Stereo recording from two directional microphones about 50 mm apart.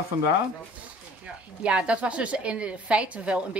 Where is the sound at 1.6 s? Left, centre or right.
Right.